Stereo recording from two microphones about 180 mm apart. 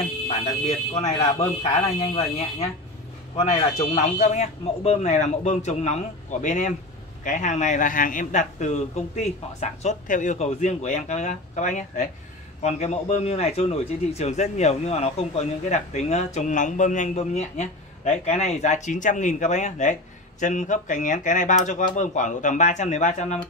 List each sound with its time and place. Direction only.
0.7 s a man's voice: 35° left (ahead or behind)